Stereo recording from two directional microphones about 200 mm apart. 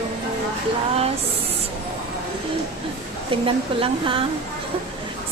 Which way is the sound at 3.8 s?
25° right (ahead or behind).